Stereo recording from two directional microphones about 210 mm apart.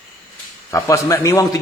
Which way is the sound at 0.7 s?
15° left (ahead or behind).